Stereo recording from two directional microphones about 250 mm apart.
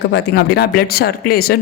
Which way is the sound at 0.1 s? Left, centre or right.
Left.